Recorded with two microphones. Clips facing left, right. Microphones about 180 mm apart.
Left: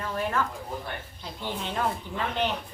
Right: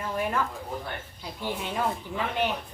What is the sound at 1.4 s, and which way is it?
Speech, 10° right (ahead or behind).